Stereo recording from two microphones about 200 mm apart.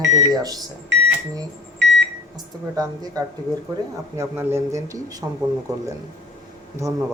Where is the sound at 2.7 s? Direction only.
15° right (ahead or behind).